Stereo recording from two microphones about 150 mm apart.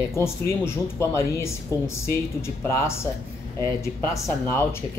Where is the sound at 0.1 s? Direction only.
15° left (ahead or behind).